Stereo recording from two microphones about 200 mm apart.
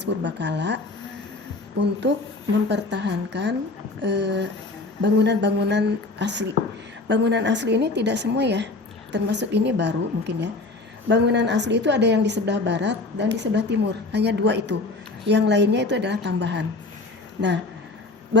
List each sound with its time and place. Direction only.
0.0 s a woman's voice: 60° right (ahead or behind)
1.8 s a woman's voice: 60° right (ahead or behind)